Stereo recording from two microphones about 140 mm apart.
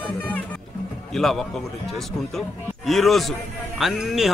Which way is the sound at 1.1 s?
Centre (ahead or behind).